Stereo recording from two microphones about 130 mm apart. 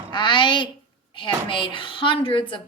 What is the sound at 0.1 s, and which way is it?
Speech, 35° left (ahead or behind).